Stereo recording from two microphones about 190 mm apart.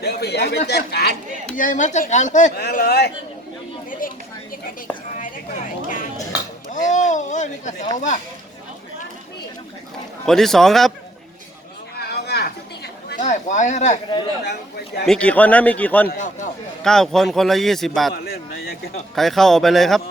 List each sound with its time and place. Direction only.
0.0 s a man's voice: 60° left (ahead or behind)
1.5 s a woman's voice: 40° left (ahead or behind)
2.6 s a man's voice: 55° left (ahead or behind)
5.9 s a sound: 45° left (ahead or behind)
6.7 s a woman's voice: 40° left (ahead or behind)
10.2 s a man's voice: centre (ahead or behind)
11.9 s a sound: 60° left (ahead or behind)
13.1 s speech: 40° left (ahead or behind)
15.0 s a man's voice: 5° left (ahead or behind)
16.1 s a woman's voice: 40° left (ahead or behind)
16.8 s a man's voice: centre (ahead or behind)
18.1 s a man's voice: 55° left (ahead or behind)
19.1 s a man's voice: centre (ahead or behind)